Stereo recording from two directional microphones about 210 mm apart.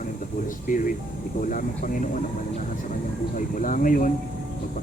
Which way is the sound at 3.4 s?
40° left (ahead or behind).